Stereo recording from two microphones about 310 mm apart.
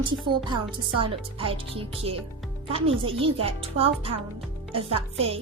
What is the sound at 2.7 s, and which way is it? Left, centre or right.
A woman's voice, centre.